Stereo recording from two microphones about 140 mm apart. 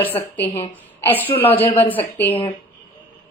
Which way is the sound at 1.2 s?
40° left (ahead or behind).